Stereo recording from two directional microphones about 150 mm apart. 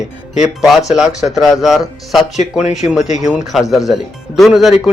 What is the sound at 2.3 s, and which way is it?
Speech, 50° left (ahead or behind).